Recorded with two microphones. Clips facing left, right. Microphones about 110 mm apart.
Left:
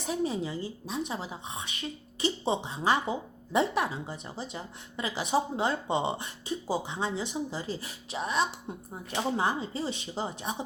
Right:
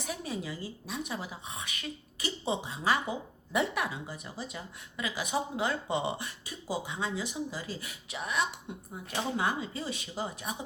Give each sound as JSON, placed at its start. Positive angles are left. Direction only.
{"t": 0.1, "sound": "a woman's voice", "side_deg": 25}